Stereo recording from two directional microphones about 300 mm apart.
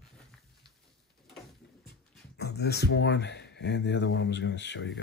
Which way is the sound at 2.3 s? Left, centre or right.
Left.